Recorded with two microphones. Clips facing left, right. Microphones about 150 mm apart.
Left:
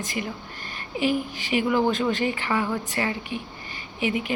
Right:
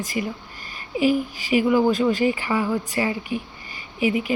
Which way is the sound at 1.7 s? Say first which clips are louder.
Right 3 dB; 5° right (ahead or behind).